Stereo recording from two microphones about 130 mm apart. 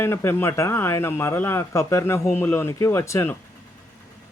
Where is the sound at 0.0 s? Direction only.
20° left (ahead or behind).